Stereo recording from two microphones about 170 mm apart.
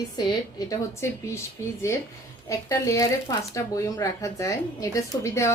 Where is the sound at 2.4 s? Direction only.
20° left (ahead or behind).